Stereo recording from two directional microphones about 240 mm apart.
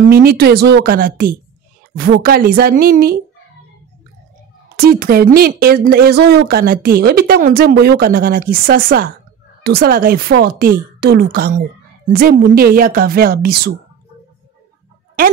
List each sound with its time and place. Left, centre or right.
0.0 s a woman's voice: right
4.7 s a woman's voice: right